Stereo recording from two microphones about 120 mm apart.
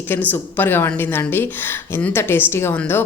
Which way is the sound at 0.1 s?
15° left (ahead or behind).